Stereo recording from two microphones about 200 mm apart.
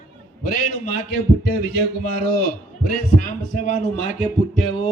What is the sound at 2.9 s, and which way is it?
A man's voice, 45° left (ahead or behind).